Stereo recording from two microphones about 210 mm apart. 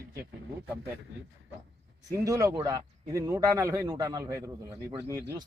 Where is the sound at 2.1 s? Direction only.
15° right (ahead or behind).